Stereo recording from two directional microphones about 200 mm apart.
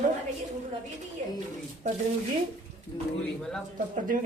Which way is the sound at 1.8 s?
35° right (ahead or behind).